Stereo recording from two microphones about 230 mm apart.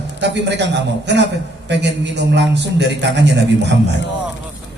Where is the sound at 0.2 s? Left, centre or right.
Right.